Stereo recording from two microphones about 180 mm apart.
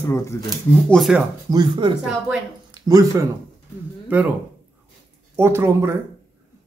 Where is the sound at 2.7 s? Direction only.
20° right (ahead or behind).